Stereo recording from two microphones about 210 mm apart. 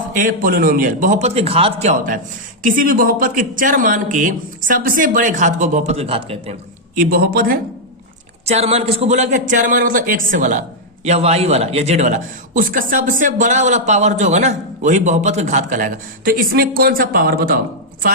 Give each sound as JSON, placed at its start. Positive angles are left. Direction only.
{"t": 0.2, "sound": "a man's voice", "side_deg": -40}
{"t": 6.9, "sound": "speech", "side_deg": -45}
{"t": 8.4, "sound": "a man's voice", "side_deg": -30}